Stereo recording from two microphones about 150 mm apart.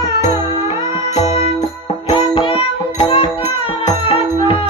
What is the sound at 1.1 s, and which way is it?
Music, 45° left (ahead or behind).